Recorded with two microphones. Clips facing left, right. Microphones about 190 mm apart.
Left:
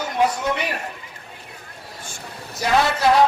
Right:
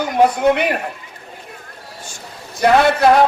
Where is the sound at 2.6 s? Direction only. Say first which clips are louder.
Right 6 dB; 55° right (ahead or behind).